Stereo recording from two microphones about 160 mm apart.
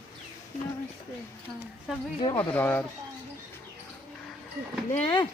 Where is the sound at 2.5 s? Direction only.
10° left (ahead or behind).